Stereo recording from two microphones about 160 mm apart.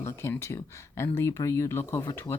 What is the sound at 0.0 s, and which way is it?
Speech, 15° left (ahead or behind).